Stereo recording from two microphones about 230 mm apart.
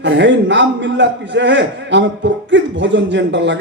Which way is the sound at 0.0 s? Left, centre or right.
Right.